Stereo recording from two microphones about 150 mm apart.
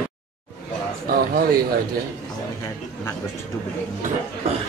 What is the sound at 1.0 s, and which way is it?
Speech, 80° right.